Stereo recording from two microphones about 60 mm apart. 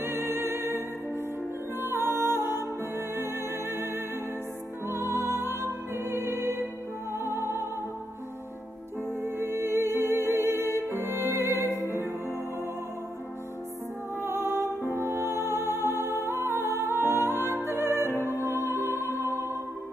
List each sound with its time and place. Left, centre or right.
0.0 s music: right
9.2 s music: right
11.7 s music: right
14.3 s music: right
18.1 s music: right
19.2 s music: left